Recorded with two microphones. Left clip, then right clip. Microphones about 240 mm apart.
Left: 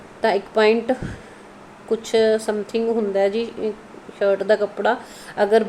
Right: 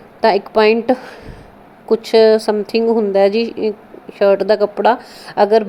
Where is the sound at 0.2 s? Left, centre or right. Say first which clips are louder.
Right 6 dB; right.